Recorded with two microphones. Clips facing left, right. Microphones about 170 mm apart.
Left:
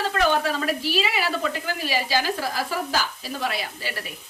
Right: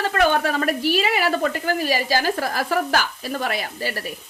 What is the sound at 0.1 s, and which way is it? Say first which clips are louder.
A woman's voice: right 3 dB; 55° right (ahead or behind).